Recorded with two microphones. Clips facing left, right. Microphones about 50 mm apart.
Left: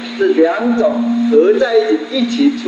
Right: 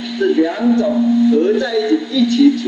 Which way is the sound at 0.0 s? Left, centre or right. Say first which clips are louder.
Left 3 dB; left.